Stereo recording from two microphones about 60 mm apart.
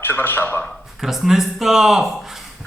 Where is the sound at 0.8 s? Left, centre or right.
Centre.